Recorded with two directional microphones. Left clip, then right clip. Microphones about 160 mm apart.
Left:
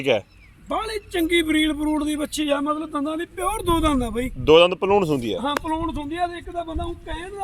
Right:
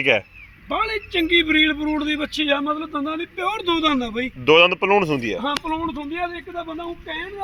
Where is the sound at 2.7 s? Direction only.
Centre (ahead or behind).